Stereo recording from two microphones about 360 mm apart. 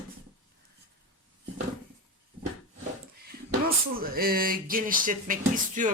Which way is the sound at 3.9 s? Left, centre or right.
Right.